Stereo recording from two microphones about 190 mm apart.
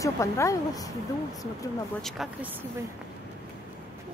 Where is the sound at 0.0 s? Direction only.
15° left (ahead or behind).